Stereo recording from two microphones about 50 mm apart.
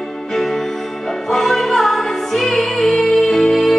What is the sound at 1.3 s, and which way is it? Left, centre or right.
Music, centre.